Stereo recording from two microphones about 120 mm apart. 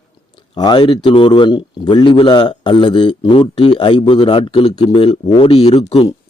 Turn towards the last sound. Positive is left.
turn(degrees=55)  # may be behind; listen again after turning